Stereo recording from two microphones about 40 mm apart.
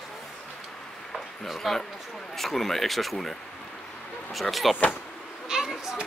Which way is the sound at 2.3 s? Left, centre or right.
Centre.